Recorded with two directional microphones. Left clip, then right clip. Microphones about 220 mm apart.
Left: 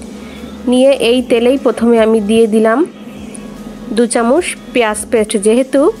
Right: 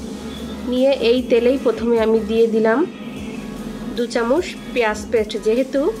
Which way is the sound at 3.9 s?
40° left (ahead or behind).